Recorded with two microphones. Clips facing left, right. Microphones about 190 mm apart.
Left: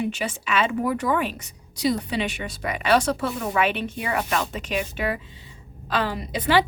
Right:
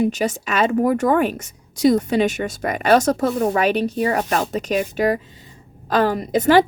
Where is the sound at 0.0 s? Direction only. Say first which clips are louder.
Right 7 dB; 40° right (ahead or behind).